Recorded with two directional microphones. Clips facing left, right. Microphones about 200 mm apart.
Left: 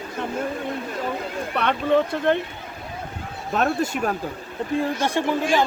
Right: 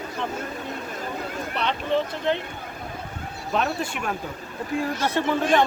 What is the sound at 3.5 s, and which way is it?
Speech, 45° left (ahead or behind).